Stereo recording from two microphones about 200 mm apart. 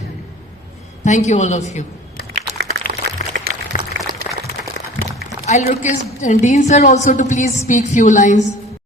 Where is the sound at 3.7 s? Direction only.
40° left (ahead or behind).